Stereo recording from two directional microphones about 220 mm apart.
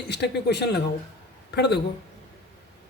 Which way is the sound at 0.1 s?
50° left (ahead or behind).